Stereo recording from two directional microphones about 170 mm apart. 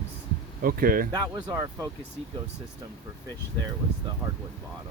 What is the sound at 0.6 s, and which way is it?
Speech, 60° right (ahead or behind).